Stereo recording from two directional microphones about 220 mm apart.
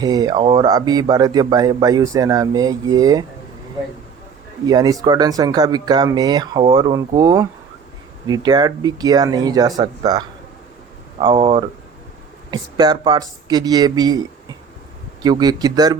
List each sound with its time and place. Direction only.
0.0 s a man's voice: 15° right (ahead or behind)
4.6 s a man's voice: 15° right (ahead or behind)
15.2 s a man's voice: 15° right (ahead or behind)